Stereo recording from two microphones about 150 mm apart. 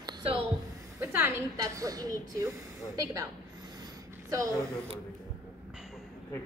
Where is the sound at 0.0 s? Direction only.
30° right (ahead or behind).